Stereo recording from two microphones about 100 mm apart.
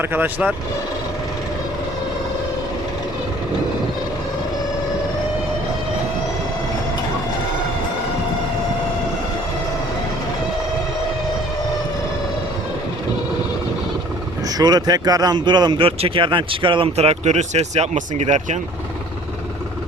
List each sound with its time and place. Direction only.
0.0 s speech: 20° right (ahead or behind)
14.6 s speech: 40° right (ahead or behind)
15.8 s speech: 65° right (ahead or behind)
17.6 s speech: 90° right